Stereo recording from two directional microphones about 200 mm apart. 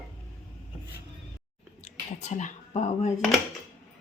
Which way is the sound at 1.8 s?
35° left (ahead or behind).